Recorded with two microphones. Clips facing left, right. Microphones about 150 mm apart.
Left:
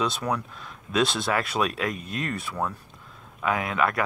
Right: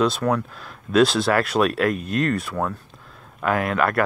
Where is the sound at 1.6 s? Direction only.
60° right (ahead or behind).